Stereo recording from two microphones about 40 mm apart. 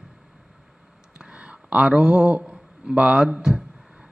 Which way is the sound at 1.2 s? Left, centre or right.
Right.